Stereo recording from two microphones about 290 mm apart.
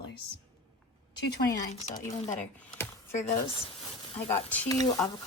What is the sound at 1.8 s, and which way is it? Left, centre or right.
Speech, left.